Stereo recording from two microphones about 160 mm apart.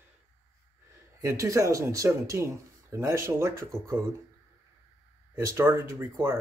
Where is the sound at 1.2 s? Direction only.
20° right (ahead or behind).